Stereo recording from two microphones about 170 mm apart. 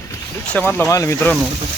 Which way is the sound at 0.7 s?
15° left (ahead or behind).